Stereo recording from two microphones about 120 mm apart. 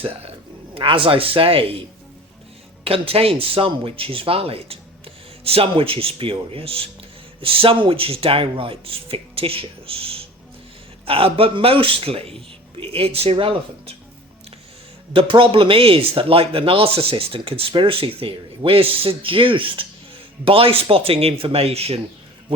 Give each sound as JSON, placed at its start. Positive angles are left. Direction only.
{"t": 0.0, "sound": "speech", "side_deg": -50}
{"t": 2.8, "sound": "speech", "side_deg": -50}
{"t": 15.1, "sound": "speech", "side_deg": -45}